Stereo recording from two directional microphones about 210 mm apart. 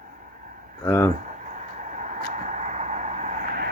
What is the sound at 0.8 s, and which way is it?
Speech, 10° left (ahead or behind).